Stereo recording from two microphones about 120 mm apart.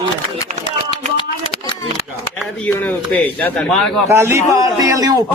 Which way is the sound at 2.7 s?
15° left (ahead or behind).